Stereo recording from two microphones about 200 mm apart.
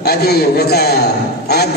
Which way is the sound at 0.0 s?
50° left (ahead or behind).